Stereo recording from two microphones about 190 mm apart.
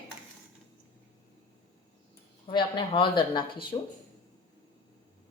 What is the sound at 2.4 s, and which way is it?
Speech, 25° left (ahead or behind).